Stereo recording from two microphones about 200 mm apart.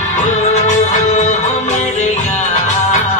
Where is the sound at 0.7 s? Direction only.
35° left (ahead or behind).